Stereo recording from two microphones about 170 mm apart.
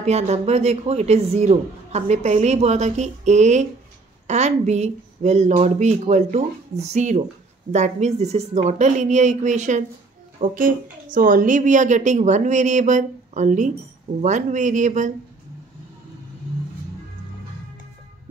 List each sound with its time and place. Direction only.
0.0 s a man's voice: 40° right (ahead or behind)